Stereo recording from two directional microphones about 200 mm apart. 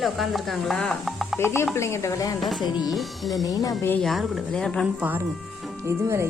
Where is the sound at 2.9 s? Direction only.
Centre (ahead or behind).